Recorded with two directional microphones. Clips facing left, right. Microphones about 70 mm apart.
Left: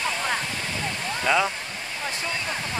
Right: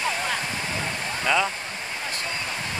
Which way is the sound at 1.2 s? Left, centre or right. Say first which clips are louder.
Left 1 dB; centre.